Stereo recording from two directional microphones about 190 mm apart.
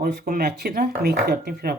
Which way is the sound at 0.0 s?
50° right (ahead or behind).